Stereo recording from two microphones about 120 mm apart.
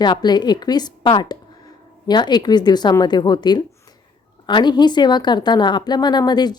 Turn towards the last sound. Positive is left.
turn(degrees=35)  # may be behind; listen again after turning